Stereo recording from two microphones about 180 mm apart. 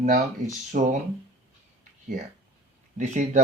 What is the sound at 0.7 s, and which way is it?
Speech, 45° right (ahead or behind).